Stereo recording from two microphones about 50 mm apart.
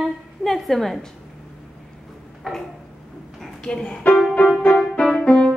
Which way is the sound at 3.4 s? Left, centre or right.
Centre.